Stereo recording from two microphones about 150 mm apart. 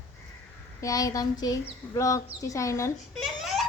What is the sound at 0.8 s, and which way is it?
A child's voice, 25° left (ahead or behind).